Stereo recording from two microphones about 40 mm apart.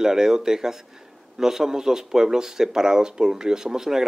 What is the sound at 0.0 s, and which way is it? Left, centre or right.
Speech, centre.